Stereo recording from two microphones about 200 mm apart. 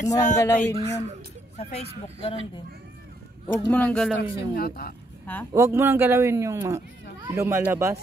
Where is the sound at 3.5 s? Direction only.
10° left (ahead or behind).